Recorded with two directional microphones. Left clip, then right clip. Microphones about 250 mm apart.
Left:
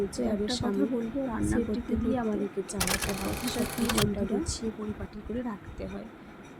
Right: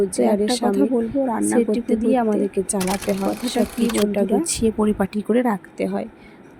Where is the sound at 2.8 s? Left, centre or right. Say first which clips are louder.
Right 8 dB; centre.